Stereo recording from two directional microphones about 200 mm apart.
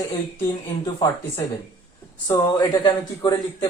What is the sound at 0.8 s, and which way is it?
Speech, 20° left (ahead or behind).